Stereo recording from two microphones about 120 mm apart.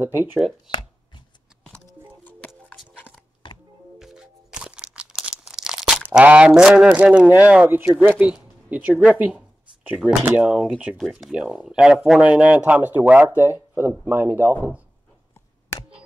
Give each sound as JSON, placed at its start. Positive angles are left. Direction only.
{"t": 0.0, "sound": "speech", "side_deg": -15}
{"t": 4.0, "sound": "music", "side_deg": -5}
{"t": 6.0, "sound": "speech", "side_deg": -10}
{"t": 8.3, "sound": "a sound", "side_deg": -10}
{"t": 9.0, "sound": "speech", "side_deg": -10}